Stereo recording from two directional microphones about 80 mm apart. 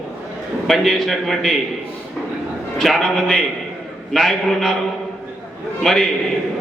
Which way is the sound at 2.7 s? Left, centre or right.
Centre.